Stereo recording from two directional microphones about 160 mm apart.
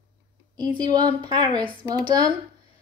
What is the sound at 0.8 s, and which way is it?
Speech, 25° right (ahead or behind).